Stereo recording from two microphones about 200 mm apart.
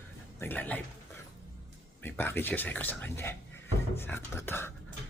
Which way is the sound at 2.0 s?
10° left (ahead or behind).